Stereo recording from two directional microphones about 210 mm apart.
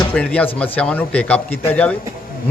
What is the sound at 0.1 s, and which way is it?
A man's voice, 5° left (ahead or behind).